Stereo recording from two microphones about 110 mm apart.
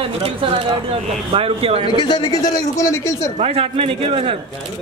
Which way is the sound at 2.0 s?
40° left (ahead or behind).